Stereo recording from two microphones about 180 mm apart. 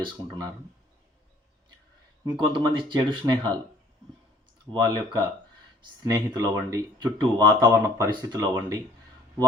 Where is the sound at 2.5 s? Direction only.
25° right (ahead or behind).